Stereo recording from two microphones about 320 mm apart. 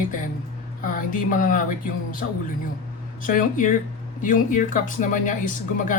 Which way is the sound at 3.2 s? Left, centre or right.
Left.